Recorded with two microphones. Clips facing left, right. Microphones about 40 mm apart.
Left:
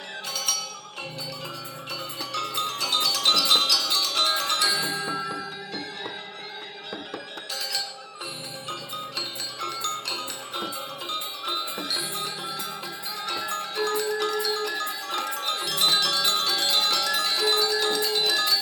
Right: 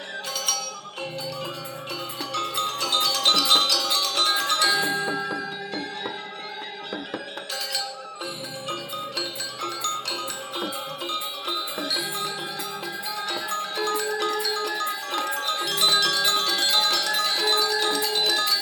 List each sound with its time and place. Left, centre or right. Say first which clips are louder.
2.3 s music: right 2 dB; right
9.1 s glockenspiel: right 2 dB; right
13.2 s music: even; right